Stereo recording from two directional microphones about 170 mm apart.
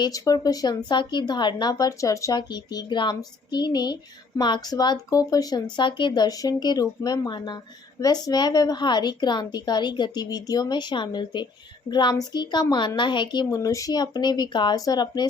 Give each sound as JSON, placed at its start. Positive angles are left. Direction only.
{"t": 0.0, "sound": "speech", "side_deg": 20}